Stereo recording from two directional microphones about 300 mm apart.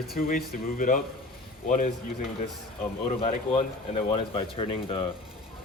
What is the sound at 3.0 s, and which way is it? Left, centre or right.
A man's voice, left.